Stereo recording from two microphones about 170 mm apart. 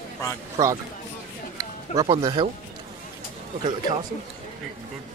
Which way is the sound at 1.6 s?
25° right (ahead or behind).